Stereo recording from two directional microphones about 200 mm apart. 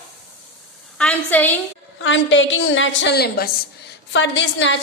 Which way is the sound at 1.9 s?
70° left (ahead or behind).